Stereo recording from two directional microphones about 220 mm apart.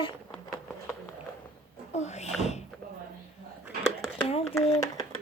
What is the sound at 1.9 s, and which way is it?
Speech, 30° left (ahead or behind).